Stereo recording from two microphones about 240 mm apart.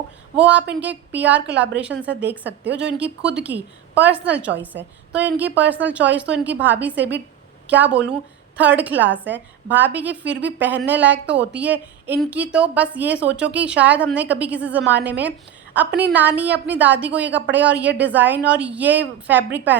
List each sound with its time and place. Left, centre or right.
0.3 s a woman's voice: centre
2.5 s a woman's voice: right
3.3 s a woman's voice: centre
4.7 s a woman's voice: right
5.1 s a woman's voice: centre